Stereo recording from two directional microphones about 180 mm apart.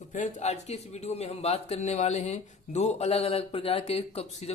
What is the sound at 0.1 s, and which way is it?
Speech, 40° left (ahead or behind).